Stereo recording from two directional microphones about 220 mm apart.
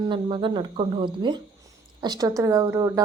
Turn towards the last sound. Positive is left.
turn(degrees=-15)  # may be behind; listen again after turning